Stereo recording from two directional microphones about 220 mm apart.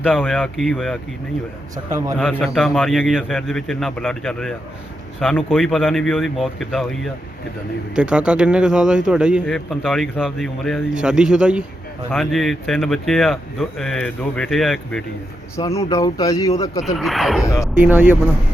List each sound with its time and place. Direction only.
0.1 s a man's voice: 5° left (ahead or behind)
1.7 s a man's voice: 15° right (ahead or behind)
2.4 s a man's voice: centre (ahead or behind)
15.9 s speech: 15° left (ahead or behind)
16.8 s a man's voice: centre (ahead or behind)
17.4 s speech: 15° left (ahead or behind)
17.7 s a man's voice: 10° right (ahead or behind)